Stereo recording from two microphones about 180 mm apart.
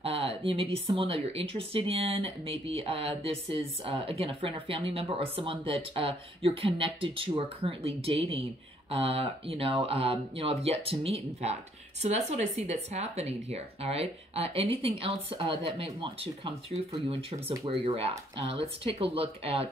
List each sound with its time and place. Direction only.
0.0 s speech: 35° right (ahead or behind)